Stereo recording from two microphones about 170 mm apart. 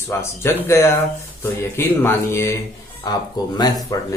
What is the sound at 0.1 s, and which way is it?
Speech, 15° left (ahead or behind).